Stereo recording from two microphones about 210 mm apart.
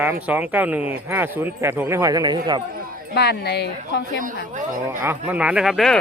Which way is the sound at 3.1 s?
50° left (ahead or behind).